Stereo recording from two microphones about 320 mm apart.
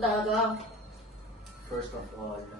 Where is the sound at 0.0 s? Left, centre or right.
Centre.